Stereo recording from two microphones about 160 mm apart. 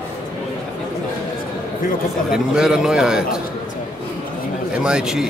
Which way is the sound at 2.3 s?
5° right (ahead or behind).